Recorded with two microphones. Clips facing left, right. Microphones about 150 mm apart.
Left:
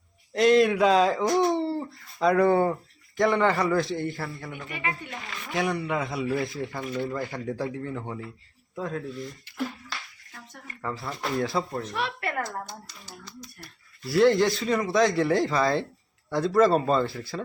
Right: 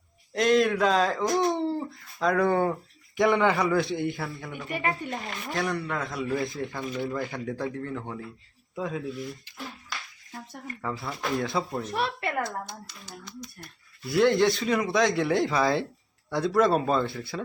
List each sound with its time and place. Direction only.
0.3 s speech: centre (ahead or behind)
4.7 s speech: 40° right (ahead or behind)
5.5 s a man's voice: 10° left (ahead or behind)
6.8 s speech: 10° right (ahead or behind)
7.3 s speech: 5° left (ahead or behind)
8.7 s speech: 5° right (ahead or behind)
10.8 s speech: centre (ahead or behind)